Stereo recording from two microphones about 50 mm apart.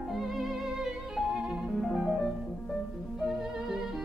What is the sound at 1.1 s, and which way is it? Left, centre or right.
Music, centre.